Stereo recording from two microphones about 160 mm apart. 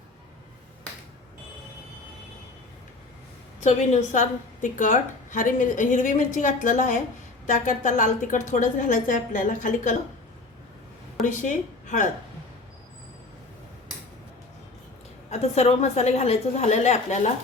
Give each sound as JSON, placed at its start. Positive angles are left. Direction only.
{"t": 3.6, "sound": "a woman's voice", "side_deg": 45}
{"t": 11.3, "sound": "a woman's voice", "side_deg": 50}
{"t": 15.3, "sound": "a woman's voice", "side_deg": 45}